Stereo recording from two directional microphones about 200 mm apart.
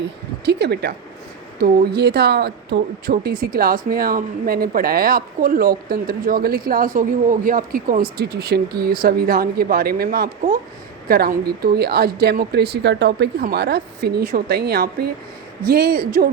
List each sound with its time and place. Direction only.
0.4 s a woman's voice: 55° right (ahead or behind)